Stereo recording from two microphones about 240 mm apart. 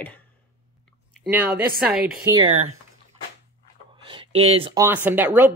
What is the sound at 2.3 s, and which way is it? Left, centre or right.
Speech, centre.